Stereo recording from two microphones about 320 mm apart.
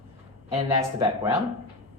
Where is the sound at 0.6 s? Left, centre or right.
Centre.